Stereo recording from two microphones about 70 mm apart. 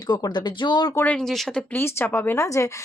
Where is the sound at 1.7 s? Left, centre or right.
Left.